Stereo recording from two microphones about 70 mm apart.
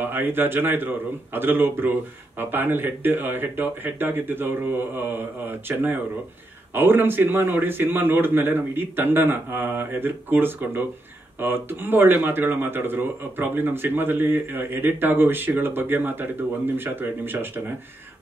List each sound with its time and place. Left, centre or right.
0.0 s speech: right